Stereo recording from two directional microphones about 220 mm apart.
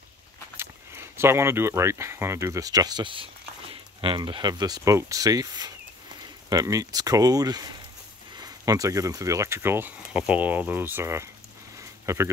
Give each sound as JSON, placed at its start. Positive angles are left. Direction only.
{"t": 0.6, "sound": "speech", "side_deg": -10}